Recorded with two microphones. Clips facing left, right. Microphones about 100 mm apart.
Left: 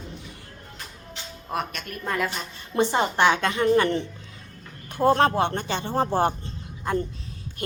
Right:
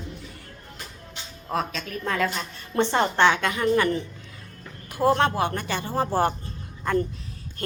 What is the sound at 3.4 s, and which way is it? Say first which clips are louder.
Speech: left 2 dB; 25° left (ahead or behind).